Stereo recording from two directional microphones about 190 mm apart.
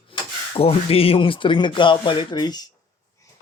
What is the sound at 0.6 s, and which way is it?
Speech, 30° left (ahead or behind).